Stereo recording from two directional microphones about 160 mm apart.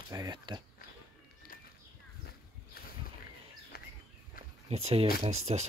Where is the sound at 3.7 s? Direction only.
70° left (ahead or behind).